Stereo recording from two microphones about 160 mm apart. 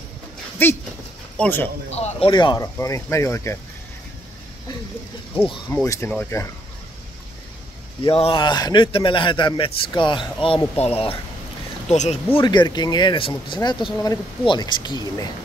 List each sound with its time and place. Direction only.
0.6 s speech: 15° left (ahead or behind)
2.0 s speech: 35° left (ahead or behind); by 3.5 s 15° left (ahead or behind)
5.7 s speech: 15° left (ahead or behind)
8.0 s speech: 35° left (ahead or behind)
12.4 s speech: 25° left (ahead or behind)